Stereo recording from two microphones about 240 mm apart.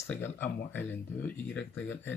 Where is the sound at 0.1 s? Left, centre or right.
Centre.